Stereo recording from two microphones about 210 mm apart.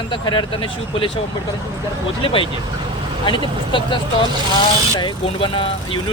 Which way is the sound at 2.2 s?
25° left (ahead or behind).